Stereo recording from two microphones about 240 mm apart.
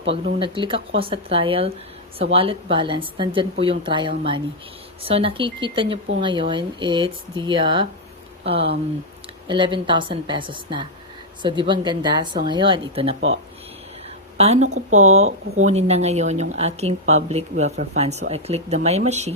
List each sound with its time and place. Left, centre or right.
0.3 s a woman's voice: centre
13.1 s speech: right
14.3 s a woman's voice: right